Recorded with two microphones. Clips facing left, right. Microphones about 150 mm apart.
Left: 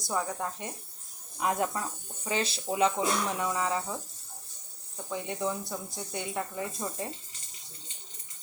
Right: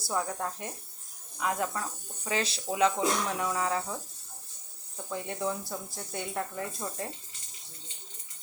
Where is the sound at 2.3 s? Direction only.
Centre (ahead or behind).